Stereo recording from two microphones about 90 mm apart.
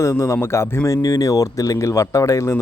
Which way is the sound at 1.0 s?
40° left (ahead or behind).